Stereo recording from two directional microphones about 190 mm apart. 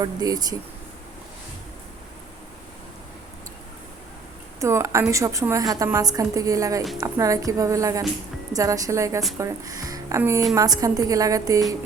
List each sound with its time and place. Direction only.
0.0 s speech: 20° right (ahead or behind)
4.6 s a woman's voice: 15° right (ahead or behind)